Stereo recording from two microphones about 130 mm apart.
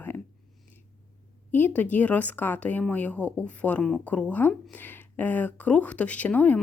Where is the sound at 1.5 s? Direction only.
15° left (ahead or behind).